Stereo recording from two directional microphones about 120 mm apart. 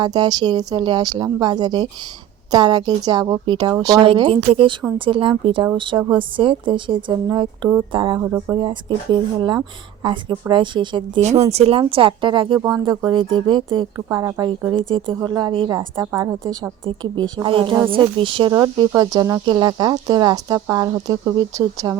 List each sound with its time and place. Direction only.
0.0 s speech: 35° right (ahead or behind)
4.0 s a woman's voice: 45° right (ahead or behind)
8.2 s a woman's voice: 20° right (ahead or behind)
9.1 s a woman's voice: 40° right (ahead or behind)
11.2 s a woman's voice: 65° right (ahead or behind); by 13.8 s 40° right (ahead or behind)
13.9 s a woman's voice: 25° right (ahead or behind)
14.4 s a woman's voice: 40° right (ahead or behind)
18.5 s speech: 30° right (ahead or behind)